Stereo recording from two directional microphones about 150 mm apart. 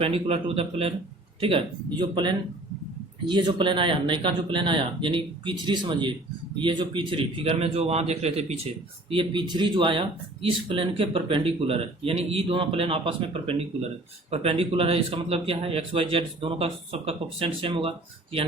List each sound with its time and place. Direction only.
0.0 s speech: 40° right (ahead or behind)